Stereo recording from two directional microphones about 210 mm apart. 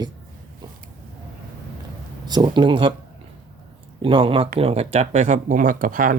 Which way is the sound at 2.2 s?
20° right (ahead or behind).